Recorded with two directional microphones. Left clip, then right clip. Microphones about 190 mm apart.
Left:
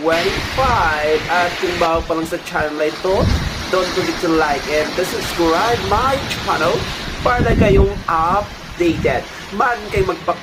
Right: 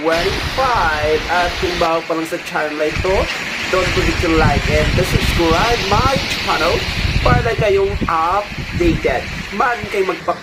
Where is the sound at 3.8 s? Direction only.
55° left (ahead or behind).